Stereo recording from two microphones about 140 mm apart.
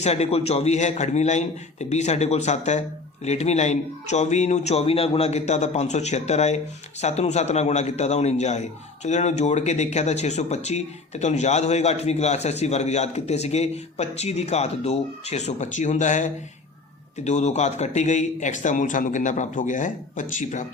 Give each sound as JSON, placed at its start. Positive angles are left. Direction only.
{"t": 0.0, "sound": "a man's voice", "side_deg": 50}